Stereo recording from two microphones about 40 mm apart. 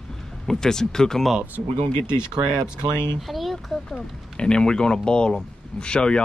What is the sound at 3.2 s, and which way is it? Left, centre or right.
Speech, centre.